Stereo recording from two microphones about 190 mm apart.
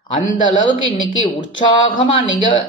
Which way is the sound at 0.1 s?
45° left (ahead or behind).